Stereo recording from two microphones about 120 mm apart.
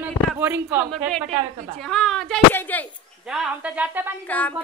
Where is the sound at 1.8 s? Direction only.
5° left (ahead or behind).